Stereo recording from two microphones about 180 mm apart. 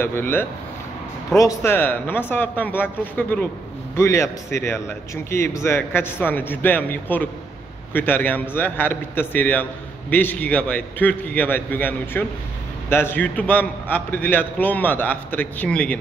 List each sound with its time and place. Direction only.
0.0 s a man's voice: 10° left (ahead or behind)